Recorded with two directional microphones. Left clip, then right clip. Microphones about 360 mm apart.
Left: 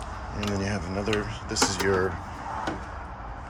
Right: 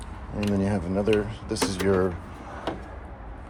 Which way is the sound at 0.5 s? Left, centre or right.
Centre.